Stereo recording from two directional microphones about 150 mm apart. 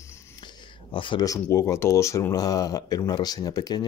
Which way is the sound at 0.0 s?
20° left (ahead or behind).